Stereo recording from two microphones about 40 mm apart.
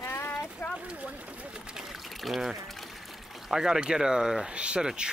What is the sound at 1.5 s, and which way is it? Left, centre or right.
Speech, centre.